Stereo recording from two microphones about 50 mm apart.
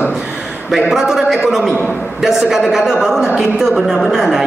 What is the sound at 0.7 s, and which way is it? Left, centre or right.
A man's voice, centre.